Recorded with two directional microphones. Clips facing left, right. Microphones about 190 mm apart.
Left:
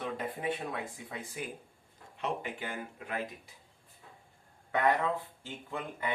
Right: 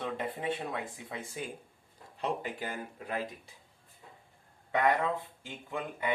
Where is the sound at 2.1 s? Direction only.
40° right (ahead or behind).